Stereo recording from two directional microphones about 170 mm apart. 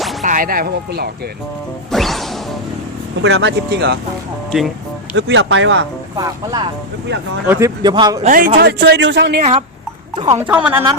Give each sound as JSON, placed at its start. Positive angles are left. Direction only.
{"t": 0.0, "sound": "music", "side_deg": 0}
{"t": 0.3, "sound": "speech", "side_deg": -55}
{"t": 1.9, "sound": "smash", "side_deg": 0}
{"t": 3.2, "sound": "speech", "side_deg": -90}
{"t": 5.1, "sound": "speech", "side_deg": -90}
{"t": 6.1, "sound": "speech", "side_deg": -20}
{"t": 7.4, "sound": "speech", "side_deg": -10}
{"t": 7.8, "sound": "speech", "side_deg": -25}
{"t": 8.2, "sound": "speech", "side_deg": -55}
{"t": 9.4, "sound": "speech", "side_deg": -40}
{"t": 10.2, "sound": "speech", "side_deg": -20}
{"t": 10.4, "sound": "speech", "side_deg": -10}